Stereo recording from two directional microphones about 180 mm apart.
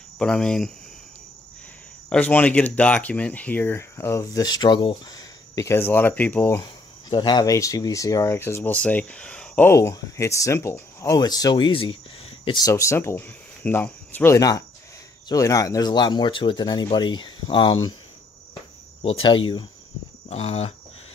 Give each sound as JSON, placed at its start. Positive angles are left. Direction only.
{"t": 0.2, "sound": "cricket", "side_deg": 5}
{"t": 2.0, "sound": "speech", "side_deg": 5}
{"t": 19.0, "sound": "speech", "side_deg": 25}
{"t": 20.2, "sound": "cricket", "side_deg": 35}